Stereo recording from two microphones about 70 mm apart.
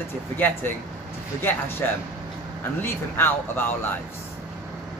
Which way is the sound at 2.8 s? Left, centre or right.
Left.